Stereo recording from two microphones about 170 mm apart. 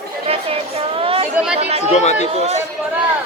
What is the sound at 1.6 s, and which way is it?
Speech, 35° right (ahead or behind).